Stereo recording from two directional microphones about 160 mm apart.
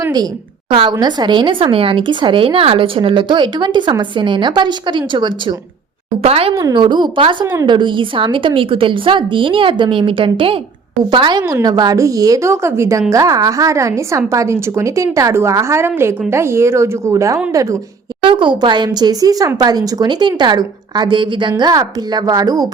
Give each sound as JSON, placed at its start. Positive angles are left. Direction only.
{"t": 0.0, "sound": "a woman's voice", "side_deg": -25}
{"t": 6.5, "sound": "a woman's voice", "side_deg": -20}
{"t": 18.2, "sound": "a woman's voice", "side_deg": -30}